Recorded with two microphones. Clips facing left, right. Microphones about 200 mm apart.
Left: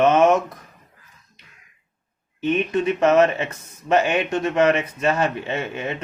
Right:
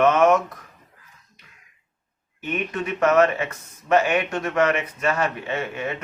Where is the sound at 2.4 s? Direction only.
25° left (ahead or behind).